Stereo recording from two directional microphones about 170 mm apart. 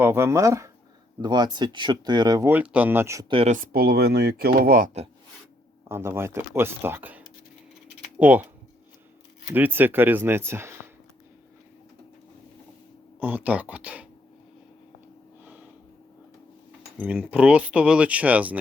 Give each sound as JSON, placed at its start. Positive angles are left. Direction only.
{"t": 0.0, "sound": "speech", "side_deg": -15}
{"t": 2.5, "sound": "speech", "side_deg": -10}
{"t": 3.2, "sound": "speech", "side_deg": -35}
{"t": 3.5, "sound": "speech", "side_deg": -60}
{"t": 5.9, "sound": "speech", "side_deg": -15}
{"t": 9.5, "sound": "speech", "side_deg": -10}
{"t": 13.1, "sound": "speech", "side_deg": -10}
{"t": 17.0, "sound": "speech", "side_deg": -10}